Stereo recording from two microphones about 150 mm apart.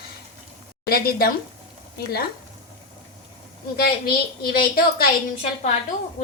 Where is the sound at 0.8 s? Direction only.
90° left.